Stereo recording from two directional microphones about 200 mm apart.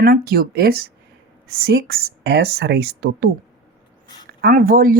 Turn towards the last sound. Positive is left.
turn(degrees=-45)  # may be behind; listen again after turning